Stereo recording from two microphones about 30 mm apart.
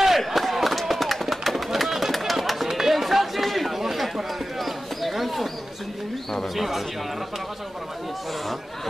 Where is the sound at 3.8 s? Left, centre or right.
Centre.